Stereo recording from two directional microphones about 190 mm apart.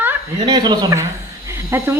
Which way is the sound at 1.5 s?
15° right (ahead or behind).